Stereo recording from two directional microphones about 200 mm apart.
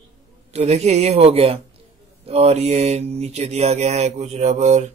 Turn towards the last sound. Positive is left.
turn(degrees=-35)  # may be behind; listen again after turning